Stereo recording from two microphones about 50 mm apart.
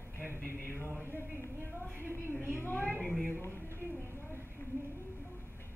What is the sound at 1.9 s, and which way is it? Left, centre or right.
Speech, left.